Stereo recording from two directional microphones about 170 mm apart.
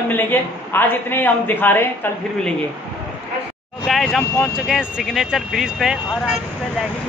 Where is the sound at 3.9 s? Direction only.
Centre (ahead or behind).